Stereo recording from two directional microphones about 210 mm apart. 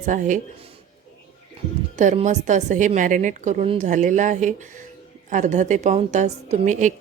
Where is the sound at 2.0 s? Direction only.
35° right (ahead or behind).